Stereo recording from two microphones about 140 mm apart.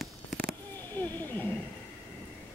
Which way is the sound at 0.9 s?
15° left (ahead or behind).